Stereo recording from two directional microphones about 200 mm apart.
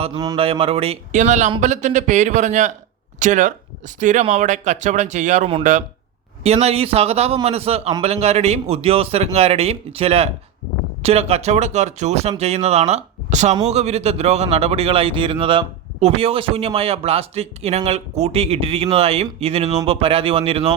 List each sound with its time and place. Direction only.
0.0 s speech: 20° right (ahead or behind)